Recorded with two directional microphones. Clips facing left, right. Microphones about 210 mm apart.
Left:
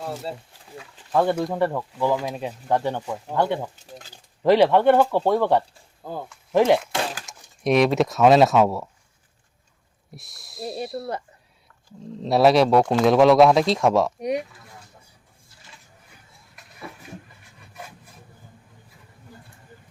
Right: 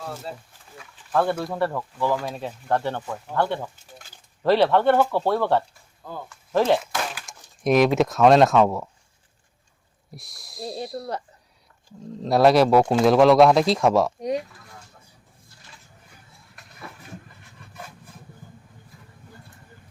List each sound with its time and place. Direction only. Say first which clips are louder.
0.0 s speech: left 3 dB; 25° left (ahead or behind)
1.1 s speech: left 2 dB; 15° left (ahead or behind)
6.9 s a sound: left 2 dB; 30° left (ahead or behind)
7.3 s speech: right 2 dB; centre (ahead or behind)
10.2 s speech: left 1 dB; centre (ahead or behind)
12.2 s speech: even; centre (ahead or behind)
14.2 s speech: left 1 dB; 15° left (ahead or behind)